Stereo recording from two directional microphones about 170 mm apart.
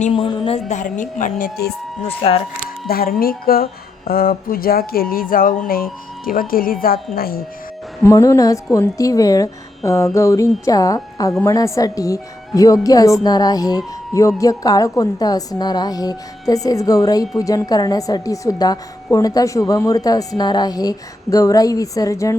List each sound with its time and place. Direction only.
0.1 s a woman's voice: 30° left (ahead or behind)
0.7 s speech: 50° left (ahead or behind)
2.0 s a woman's voice: 35° left (ahead or behind)
2.8 s speech: 60° left (ahead or behind)
8.0 s speech: 15° left (ahead or behind)